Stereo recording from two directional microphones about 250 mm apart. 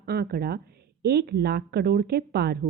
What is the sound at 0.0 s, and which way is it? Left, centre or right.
A woman's voice, right.